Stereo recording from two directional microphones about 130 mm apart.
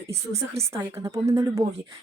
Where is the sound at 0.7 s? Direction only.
25° right (ahead or behind).